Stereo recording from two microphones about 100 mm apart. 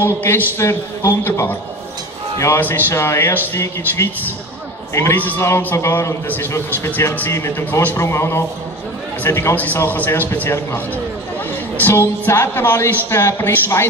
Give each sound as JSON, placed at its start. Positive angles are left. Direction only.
{"t": 0.0, "sound": "a man's voice", "side_deg": 25}